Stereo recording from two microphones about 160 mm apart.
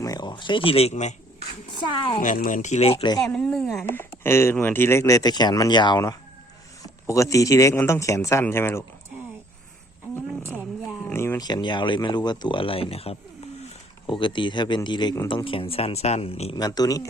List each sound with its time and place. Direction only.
0.0 s a woman's voice: 25° left (ahead or behind)
2.2 s speech: 55° left (ahead or behind); by 3.1 s 40° left (ahead or behind)
3.3 s speech: 5° left (ahead or behind)
11.0 s speech: 15° left (ahead or behind); by 16.6 s 35° left (ahead or behind)
16.6 s speech: 25° left (ahead or behind)